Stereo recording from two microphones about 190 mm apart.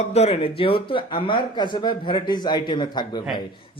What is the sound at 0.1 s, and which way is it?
Speech, 30° left (ahead or behind).